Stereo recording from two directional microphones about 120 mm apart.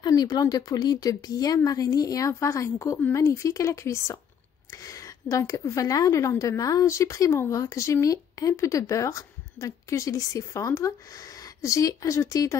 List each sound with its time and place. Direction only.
0.0 s a woman's voice: 35° left (ahead or behind)